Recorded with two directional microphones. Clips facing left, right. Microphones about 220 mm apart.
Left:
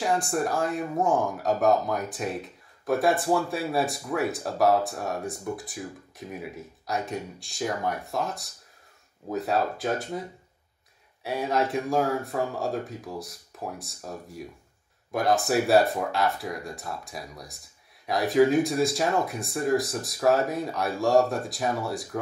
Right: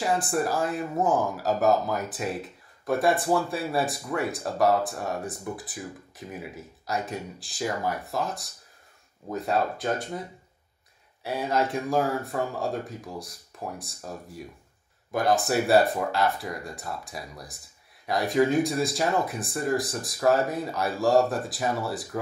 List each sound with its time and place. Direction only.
0.0 s speech: 5° right (ahead or behind)
11.2 s speech: centre (ahead or behind)